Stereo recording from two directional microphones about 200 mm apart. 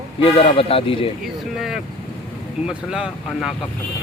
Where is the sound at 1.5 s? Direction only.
Centre (ahead or behind).